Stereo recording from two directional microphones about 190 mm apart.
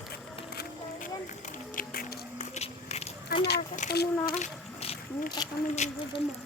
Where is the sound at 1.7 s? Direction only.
50° left (ahead or behind).